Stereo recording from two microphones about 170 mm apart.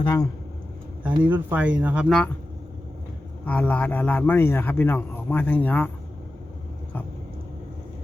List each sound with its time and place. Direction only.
0.0 s speech: 20° left (ahead or behind)
1.0 s speech: 10° right (ahead or behind)
3.4 s a man's voice: 10° left (ahead or behind)